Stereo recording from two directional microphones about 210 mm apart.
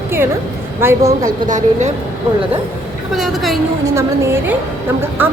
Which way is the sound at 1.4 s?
35° right (ahead or behind).